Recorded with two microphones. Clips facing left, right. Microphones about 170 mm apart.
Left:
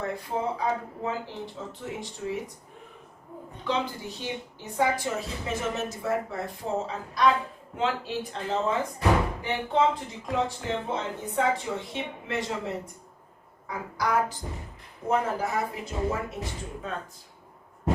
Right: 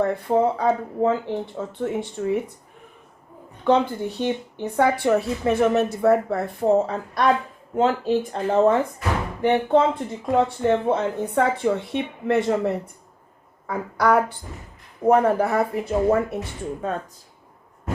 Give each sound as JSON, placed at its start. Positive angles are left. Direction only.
{"t": 0.0, "sound": "a woman's voice", "side_deg": -60}
{"t": 3.7, "sound": "a woman's voice", "side_deg": -55}
{"t": 7.8, "sound": "a woman's voice", "side_deg": -45}